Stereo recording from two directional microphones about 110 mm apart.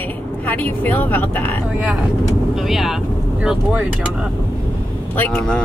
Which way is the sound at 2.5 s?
5° right (ahead or behind).